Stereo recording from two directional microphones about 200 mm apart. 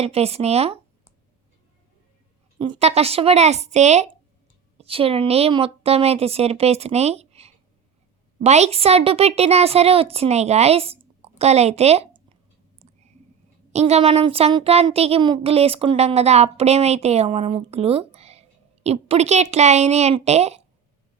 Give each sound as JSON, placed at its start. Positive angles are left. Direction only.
{"t": 0.0, "sound": "speech", "side_deg": -30}
{"t": 2.6, "sound": "speech", "side_deg": -30}
{"t": 12.8, "sound": "a sound", "side_deg": -35}
{"t": 13.7, "sound": "speech", "side_deg": -30}